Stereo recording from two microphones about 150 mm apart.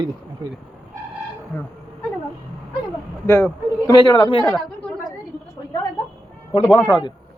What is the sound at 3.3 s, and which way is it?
Speech, 15° left (ahead or behind).